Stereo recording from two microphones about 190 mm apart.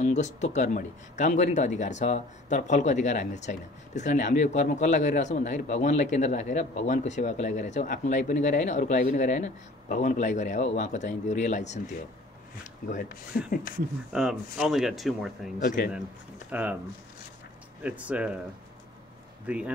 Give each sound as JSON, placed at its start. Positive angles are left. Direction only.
{"t": 0.0, "sound": "speech", "side_deg": 35}
{"t": 12.8, "sound": "a man's voice", "side_deg": 50}
{"t": 14.1, "sound": "speech", "side_deg": 0}
{"t": 15.6, "sound": "a man's voice", "side_deg": 50}
{"t": 16.4, "sound": "speech", "side_deg": -10}
{"t": 17.8, "sound": "speech", "side_deg": -5}
{"t": 19.4, "sound": "speech", "side_deg": -5}